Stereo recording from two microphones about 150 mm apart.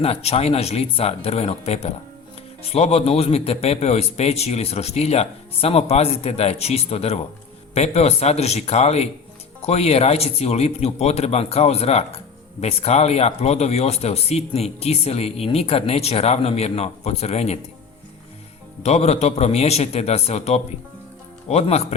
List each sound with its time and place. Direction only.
0.0 s speech: 40° left (ahead or behind)
18.8 s speech: 45° left (ahead or behind)